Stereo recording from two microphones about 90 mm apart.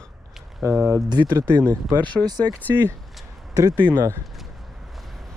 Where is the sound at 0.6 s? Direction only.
25° right (ahead or behind).